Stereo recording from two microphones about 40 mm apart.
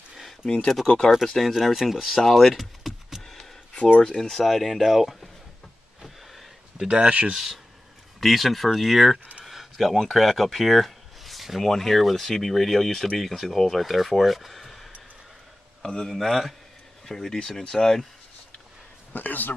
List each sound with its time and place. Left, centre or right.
0.8 s speech: centre
1.2 s speech: centre
2.1 s speech: centre
2.6 s a sound: centre
3.2 s a sound: centre
3.7 s speech: left
4.2 s speech: centre
6.9 s speech: right
7.3 s speech: centre
9.4 s a sound: centre
10.1 s speech: centre
16.1 s speech: centre
19.1 s a man's voice: left